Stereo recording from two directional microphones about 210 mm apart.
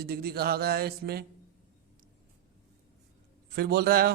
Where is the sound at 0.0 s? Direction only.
50° right (ahead or behind).